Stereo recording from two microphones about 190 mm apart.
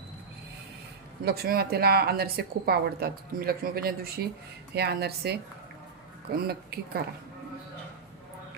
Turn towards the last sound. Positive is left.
turn(degrees=-55)  # may be behind; listen again after turning